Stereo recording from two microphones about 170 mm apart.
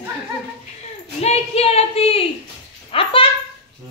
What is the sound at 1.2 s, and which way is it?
Speech, 40° left (ahead or behind).